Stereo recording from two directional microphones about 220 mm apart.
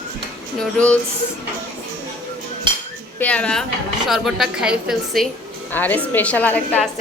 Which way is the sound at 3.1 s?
5° left (ahead or behind).